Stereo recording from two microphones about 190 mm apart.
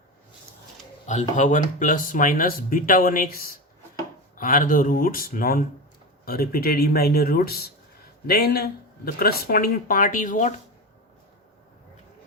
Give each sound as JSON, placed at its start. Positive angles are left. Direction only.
{"t": 1.0, "sound": "speech", "side_deg": 40}